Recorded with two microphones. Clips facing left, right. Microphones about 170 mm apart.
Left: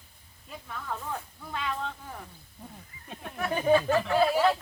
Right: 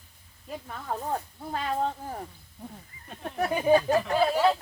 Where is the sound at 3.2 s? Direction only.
40° right (ahead or behind).